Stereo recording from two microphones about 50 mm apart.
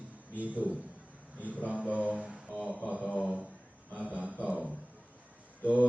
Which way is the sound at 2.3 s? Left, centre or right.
Right.